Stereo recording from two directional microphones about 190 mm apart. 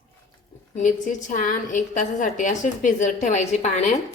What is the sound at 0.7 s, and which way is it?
A woman's voice, 40° left (ahead or behind).